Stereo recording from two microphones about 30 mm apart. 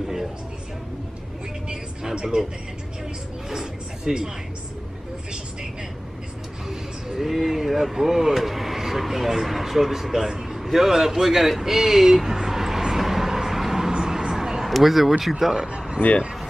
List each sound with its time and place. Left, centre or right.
2.1 s speech: right
3.4 s speech: centre
6.7 s a sound: centre
7.2 s speech: centre
8.4 s speech: centre
10.5 s a sound: centre
14.7 s speech: centre
16.0 s speech: left